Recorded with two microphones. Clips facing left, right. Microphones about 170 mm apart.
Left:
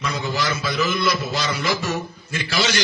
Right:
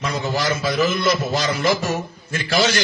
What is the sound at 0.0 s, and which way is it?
A man's voice, 45° right (ahead or behind).